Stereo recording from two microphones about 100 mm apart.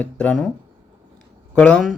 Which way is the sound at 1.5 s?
10° left (ahead or behind).